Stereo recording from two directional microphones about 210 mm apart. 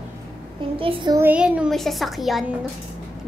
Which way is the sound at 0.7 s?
25° right (ahead or behind).